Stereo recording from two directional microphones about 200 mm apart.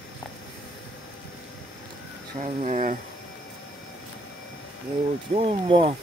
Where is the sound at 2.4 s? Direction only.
35° right (ahead or behind).